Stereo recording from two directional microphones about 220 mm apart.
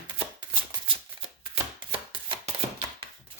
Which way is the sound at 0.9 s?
25° right (ahead or behind).